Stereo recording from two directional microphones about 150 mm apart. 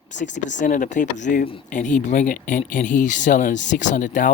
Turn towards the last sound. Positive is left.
turn(degrees=60)  # may be behind; listen again after turning